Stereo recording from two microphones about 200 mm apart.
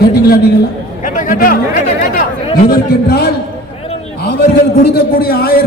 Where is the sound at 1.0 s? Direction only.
40° left (ahead or behind).